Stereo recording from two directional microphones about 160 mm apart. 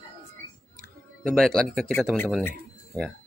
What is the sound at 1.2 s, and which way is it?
Speech, 5° left (ahead or behind).